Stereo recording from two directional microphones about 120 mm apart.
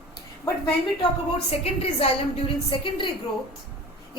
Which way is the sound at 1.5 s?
55° left (ahead or behind).